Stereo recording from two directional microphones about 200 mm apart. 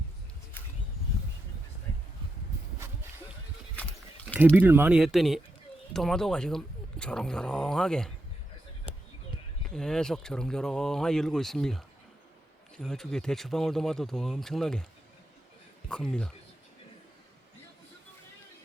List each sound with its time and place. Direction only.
2.7 s a sound: 10° right (ahead or behind)
4.4 s speech: 10° right (ahead or behind)
9.6 s speech: 5° left (ahead or behind)
15.9 s speech: 5° left (ahead or behind)